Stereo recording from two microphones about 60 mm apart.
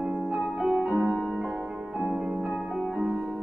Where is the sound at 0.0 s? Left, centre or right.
Centre.